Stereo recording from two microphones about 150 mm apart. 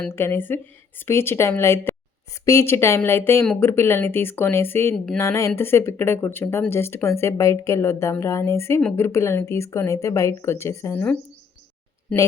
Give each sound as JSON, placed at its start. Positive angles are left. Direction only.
{"t": 0.2, "sound": "speech", "side_deg": 15}